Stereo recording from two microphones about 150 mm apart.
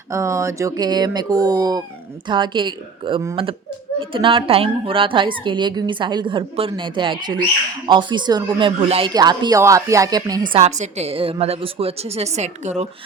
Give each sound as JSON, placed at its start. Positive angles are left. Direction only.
{"t": 0.1, "sound": "a woman's voice", "side_deg": -20}
{"t": 10.5, "sound": "a woman's voice", "side_deg": -45}